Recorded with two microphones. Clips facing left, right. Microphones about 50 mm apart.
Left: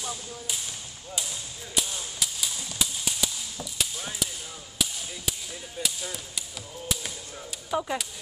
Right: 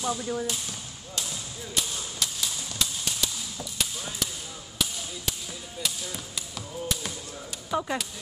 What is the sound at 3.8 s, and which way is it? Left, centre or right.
Basketball bounce, centre.